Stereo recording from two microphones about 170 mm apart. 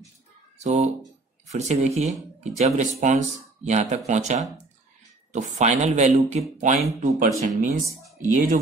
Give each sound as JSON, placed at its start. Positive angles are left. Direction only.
{"t": 1.5, "sound": "speech", "side_deg": -40}
{"t": 5.3, "sound": "speech", "side_deg": -45}